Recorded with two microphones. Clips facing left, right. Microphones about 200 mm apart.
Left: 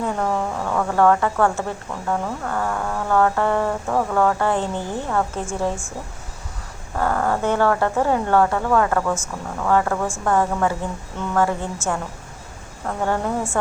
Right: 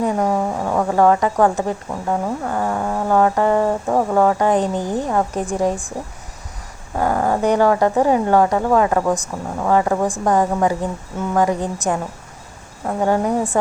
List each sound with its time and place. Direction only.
0.0 s speech: 15° right (ahead or behind)
6.9 s speech: 15° right (ahead or behind)
13.0 s speech: 15° right (ahead or behind)